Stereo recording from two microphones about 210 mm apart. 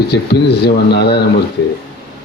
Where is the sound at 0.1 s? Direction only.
50° left (ahead or behind).